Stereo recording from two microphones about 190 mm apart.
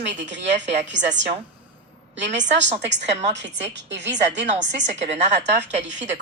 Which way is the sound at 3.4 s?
70° right (ahead or behind).